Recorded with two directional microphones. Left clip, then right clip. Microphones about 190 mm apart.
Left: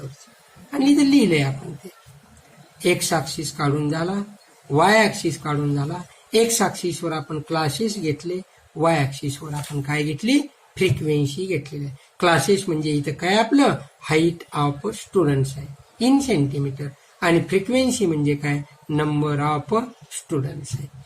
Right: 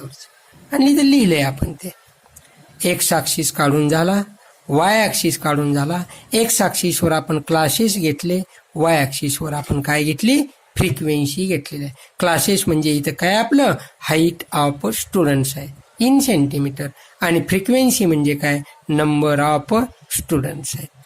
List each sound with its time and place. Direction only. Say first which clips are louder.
0.7 s a woman's voice: right 3 dB; 50° right (ahead or behind)
2.7 s speech: right 2 dB; 55° right (ahead or behind)